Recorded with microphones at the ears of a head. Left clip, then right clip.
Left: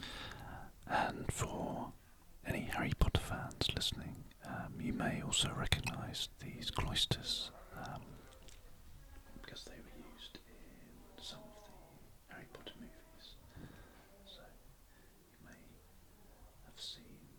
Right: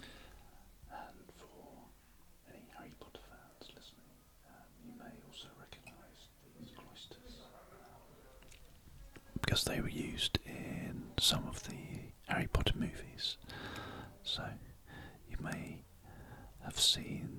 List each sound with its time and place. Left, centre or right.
0.0 s whispering: left
9.1 s whispering: right